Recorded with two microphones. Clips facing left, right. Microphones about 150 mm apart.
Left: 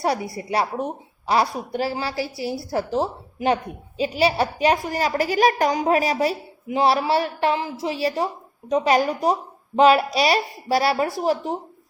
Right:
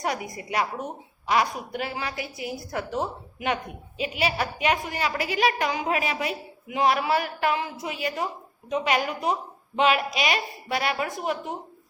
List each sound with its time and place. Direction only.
0.0 s a woman's voice: 35° left (ahead or behind)